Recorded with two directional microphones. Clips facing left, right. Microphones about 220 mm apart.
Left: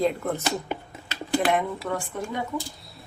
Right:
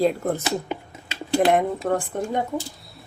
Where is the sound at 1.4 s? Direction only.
45° right (ahead or behind).